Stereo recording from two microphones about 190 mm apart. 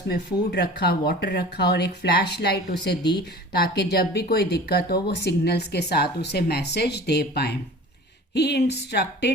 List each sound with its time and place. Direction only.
0.1 s speech: 60° left (ahead or behind)